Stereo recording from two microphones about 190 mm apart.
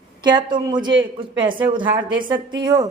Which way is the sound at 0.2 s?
25° right (ahead or behind).